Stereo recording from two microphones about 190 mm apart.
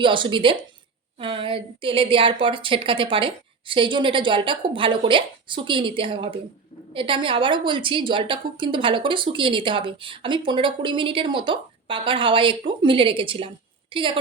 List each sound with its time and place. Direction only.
0.0 s a woman's voice: 25° right (ahead or behind)